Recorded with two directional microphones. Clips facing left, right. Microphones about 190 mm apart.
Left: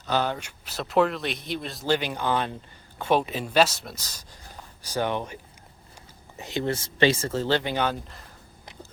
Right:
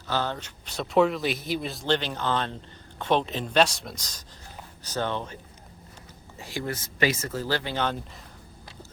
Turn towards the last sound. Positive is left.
turn(degrees=10)  # may be behind; listen again after turning